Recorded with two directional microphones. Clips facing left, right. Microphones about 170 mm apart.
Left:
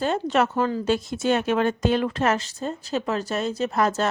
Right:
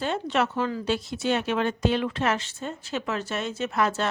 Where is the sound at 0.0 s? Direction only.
45° left (ahead or behind).